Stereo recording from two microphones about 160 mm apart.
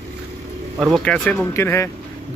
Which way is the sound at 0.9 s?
5° left (ahead or behind).